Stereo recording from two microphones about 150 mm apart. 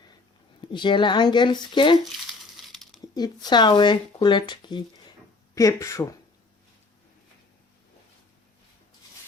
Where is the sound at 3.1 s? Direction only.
25° left (ahead or behind).